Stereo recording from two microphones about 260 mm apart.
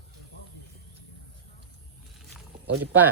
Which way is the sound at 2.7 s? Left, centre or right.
Right.